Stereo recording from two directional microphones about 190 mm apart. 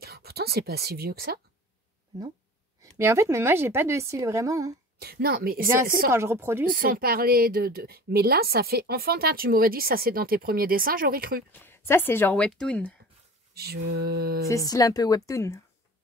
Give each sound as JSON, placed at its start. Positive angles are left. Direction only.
{"t": 0.0, "sound": "speech", "side_deg": -55}
{"t": 2.8, "sound": "a woman's voice", "side_deg": -15}
{"t": 4.9, "sound": "speech", "side_deg": -55}
{"t": 6.0, "sound": "a woman's voice", "side_deg": -15}
{"t": 6.6, "sound": "speech", "side_deg": -50}
{"t": 11.5, "sound": "speech", "side_deg": 10}
{"t": 13.6, "sound": "mantra", "side_deg": -55}
{"t": 14.7, "sound": "a woman's voice", "side_deg": 20}